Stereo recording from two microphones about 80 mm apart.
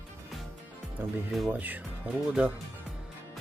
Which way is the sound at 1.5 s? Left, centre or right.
Right.